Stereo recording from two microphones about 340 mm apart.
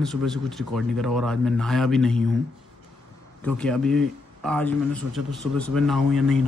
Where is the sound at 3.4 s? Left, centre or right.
Centre.